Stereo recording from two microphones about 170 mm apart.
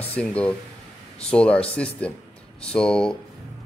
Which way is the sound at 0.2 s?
5° left (ahead or behind).